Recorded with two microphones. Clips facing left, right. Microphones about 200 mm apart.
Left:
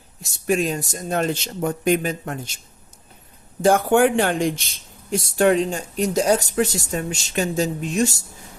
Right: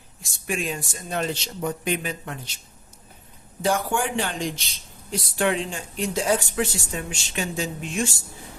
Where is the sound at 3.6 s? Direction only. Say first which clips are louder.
Left 8 dB; 55° left (ahead or behind).